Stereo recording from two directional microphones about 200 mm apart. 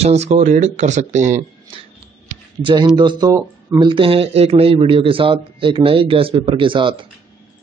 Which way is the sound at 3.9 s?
30° right (ahead or behind).